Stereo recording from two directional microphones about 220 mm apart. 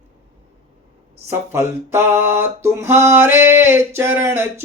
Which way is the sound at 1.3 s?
10° right (ahead or behind).